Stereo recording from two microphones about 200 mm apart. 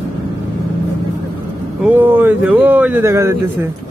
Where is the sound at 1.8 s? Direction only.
10° right (ahead or behind).